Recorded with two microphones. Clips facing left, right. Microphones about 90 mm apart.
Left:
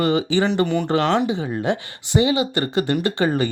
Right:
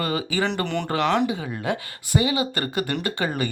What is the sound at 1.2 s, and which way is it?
Speech, 25° left (ahead or behind).